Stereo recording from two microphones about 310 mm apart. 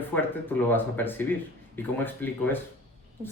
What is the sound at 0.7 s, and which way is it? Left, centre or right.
Speech, centre.